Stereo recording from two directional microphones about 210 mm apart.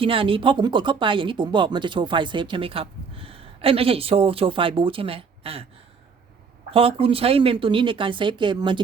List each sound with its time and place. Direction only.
0.0 s speech: 25° right (ahead or behind)
6.7 s speech: 25° right (ahead or behind)